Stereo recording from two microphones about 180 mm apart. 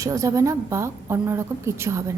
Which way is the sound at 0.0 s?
20° right (ahead or behind).